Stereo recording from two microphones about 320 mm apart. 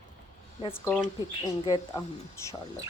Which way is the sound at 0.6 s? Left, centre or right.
Centre.